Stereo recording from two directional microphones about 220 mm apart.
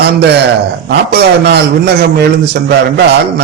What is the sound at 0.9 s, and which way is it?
A man's voice, 50° right (ahead or behind).